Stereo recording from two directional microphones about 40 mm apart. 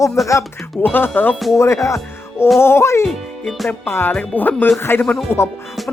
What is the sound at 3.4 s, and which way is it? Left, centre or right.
Speech, centre.